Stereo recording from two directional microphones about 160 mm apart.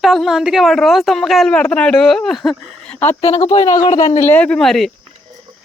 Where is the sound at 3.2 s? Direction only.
40° left (ahead or behind).